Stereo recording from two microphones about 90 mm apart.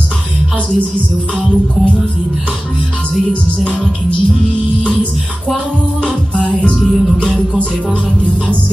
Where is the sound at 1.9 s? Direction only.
10° left (ahead or behind).